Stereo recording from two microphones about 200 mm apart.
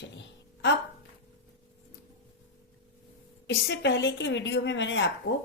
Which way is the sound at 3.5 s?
65° left (ahead or behind).